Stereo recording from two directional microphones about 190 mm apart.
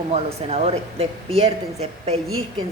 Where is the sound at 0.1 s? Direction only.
35° right (ahead or behind).